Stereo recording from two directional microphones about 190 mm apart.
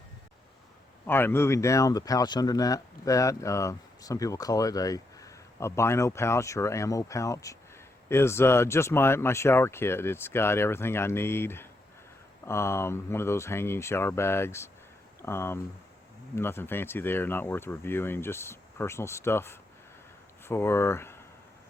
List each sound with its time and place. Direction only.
1.0 s speech: 10° left (ahead or behind)